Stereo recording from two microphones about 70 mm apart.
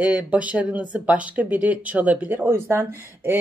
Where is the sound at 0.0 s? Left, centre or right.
Centre.